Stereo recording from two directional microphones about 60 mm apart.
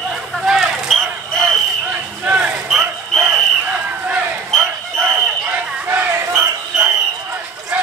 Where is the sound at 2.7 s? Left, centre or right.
Centre.